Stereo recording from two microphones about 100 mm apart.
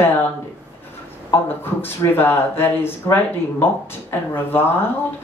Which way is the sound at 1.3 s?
20° left (ahead or behind).